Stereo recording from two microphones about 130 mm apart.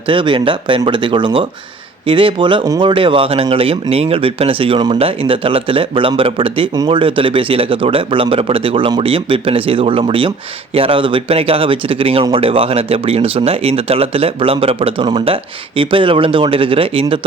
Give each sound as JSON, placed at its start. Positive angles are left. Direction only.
{"t": 0.1, "sound": "speech", "side_deg": -40}